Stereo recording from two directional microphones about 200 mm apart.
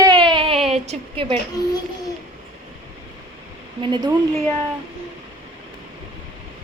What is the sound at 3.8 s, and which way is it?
Speech, 20° right (ahead or behind).